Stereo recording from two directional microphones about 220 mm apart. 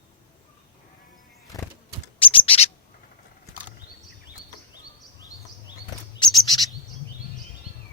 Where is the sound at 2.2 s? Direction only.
25° left (ahead or behind).